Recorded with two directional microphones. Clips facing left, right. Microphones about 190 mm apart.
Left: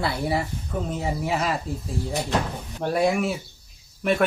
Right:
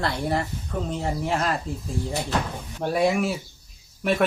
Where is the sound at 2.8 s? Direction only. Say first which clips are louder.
Even; centre (ahead or behind).